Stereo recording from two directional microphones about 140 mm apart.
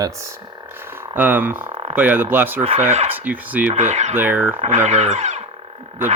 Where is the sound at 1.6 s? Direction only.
40° right (ahead or behind).